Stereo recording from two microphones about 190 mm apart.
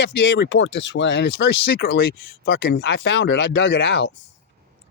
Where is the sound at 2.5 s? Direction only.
80° left; by 4.1 s 65° left (ahead or behind).